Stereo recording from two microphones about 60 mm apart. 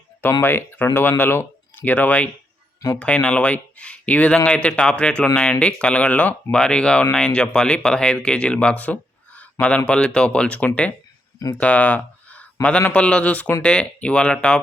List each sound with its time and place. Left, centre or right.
0.2 s speech: left; by 14.6 s centre